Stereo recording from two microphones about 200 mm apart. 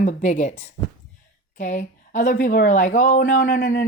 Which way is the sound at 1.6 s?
35° left (ahead or behind).